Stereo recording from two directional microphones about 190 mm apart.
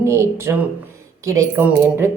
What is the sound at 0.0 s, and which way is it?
A woman's voice, 15° right (ahead or behind).